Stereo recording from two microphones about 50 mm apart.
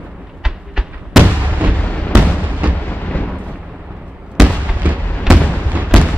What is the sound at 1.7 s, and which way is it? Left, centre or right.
Fireworks, left.